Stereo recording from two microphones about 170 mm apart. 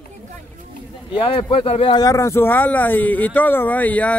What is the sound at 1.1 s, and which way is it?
Speech, 30° left (ahead or behind).